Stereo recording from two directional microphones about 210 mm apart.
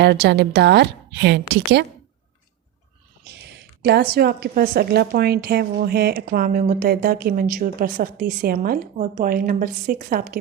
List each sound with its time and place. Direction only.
0.0 s a woman's voice: 55° right (ahead or behind)
3.8 s a woman's voice: 50° right (ahead or behind)